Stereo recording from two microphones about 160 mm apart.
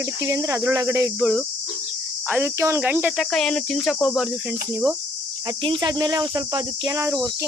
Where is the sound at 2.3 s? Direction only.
10° right (ahead or behind).